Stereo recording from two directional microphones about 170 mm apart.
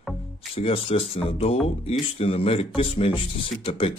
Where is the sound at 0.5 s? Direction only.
35° left (ahead or behind).